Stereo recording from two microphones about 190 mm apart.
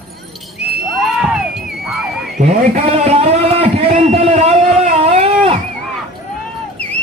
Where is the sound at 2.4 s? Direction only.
40° right (ahead or behind).